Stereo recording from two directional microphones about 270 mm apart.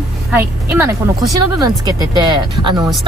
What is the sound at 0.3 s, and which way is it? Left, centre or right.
Speech, centre.